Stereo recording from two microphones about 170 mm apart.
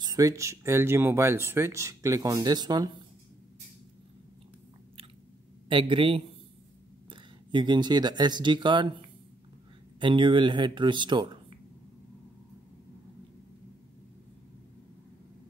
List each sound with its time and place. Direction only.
0.0 s speech: 20° right (ahead or behind)
5.7 s speech: 30° right (ahead or behind)
9.9 s speech: 30° right (ahead or behind)